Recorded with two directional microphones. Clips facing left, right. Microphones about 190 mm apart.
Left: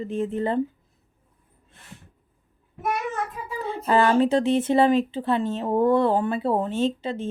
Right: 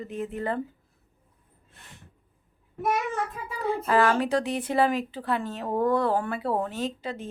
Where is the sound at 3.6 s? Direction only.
25° left (ahead or behind).